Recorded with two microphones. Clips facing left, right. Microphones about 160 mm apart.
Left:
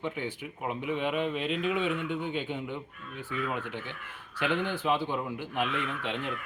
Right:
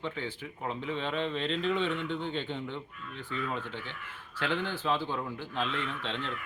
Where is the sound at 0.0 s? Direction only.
15° left (ahead or behind).